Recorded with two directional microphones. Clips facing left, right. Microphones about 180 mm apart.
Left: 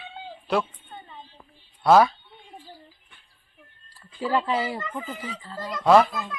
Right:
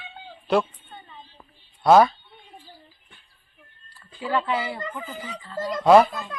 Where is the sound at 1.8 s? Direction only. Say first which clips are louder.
Right 2 dB; centre (ahead or behind).